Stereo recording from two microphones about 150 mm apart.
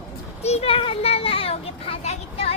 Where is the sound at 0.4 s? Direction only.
45° left (ahead or behind).